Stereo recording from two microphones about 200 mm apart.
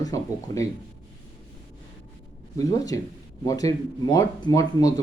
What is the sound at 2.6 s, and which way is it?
A man's voice, 15° left (ahead or behind).